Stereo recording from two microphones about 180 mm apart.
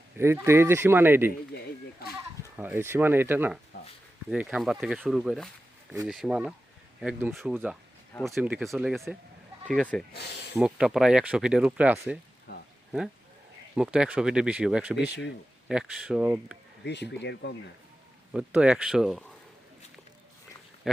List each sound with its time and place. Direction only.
0.2 s speech: 15° right (ahead or behind)
2.6 s speech: 10° right (ahead or behind)
10.1 s speech: 65° left (ahead or behind)
10.5 s speech: 5° right (ahead or behind)
12.5 s a sound: 75° left (ahead or behind)
13.7 s speech: 5° right (ahead or behind)
16.8 s speech: 70° left (ahead or behind)
18.3 s speech: 5° right (ahead or behind)
20.9 s speech: centre (ahead or behind)